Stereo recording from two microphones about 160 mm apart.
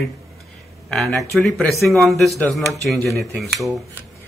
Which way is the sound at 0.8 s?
Centre (ahead or behind).